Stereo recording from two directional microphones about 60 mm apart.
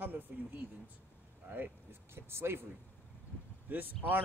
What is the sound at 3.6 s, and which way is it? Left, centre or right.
Speech, right.